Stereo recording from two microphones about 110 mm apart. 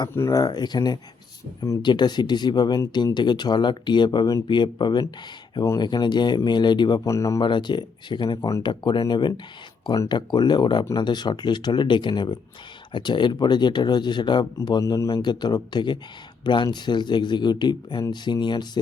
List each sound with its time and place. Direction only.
0.3 s speech: 35° left (ahead or behind)
7.1 s speech: 30° left (ahead or behind)
7.4 s speech: 45° left (ahead or behind)